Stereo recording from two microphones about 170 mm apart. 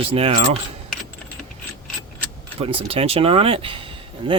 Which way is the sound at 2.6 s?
35° right (ahead or behind).